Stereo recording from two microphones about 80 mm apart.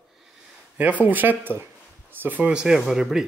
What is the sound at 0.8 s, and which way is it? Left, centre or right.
Speech, centre.